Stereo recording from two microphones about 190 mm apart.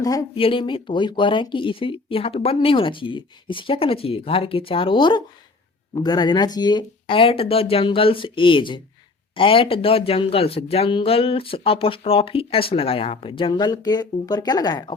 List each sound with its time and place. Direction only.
0.0 s speech: 20° left (ahead or behind)